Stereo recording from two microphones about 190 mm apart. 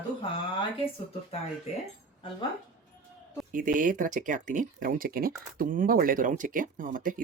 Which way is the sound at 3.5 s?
45° right (ahead or behind).